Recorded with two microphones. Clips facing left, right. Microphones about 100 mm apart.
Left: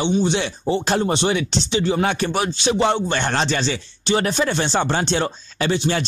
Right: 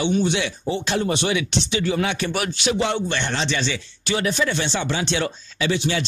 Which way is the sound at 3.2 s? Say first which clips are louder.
Left 3 dB; 45° left (ahead or behind).